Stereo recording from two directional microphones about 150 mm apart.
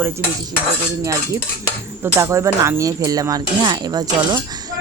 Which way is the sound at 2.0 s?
20° right (ahead or behind).